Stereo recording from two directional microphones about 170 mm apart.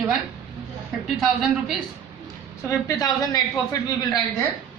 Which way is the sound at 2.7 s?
20° left (ahead or behind).